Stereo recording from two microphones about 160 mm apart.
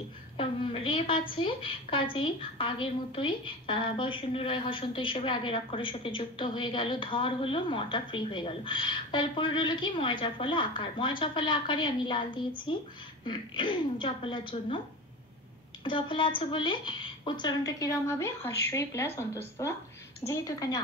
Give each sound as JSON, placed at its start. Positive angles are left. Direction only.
{"t": 0.4, "sound": "a woman's voice", "side_deg": 35}
{"t": 15.8, "sound": "a woman's voice", "side_deg": 30}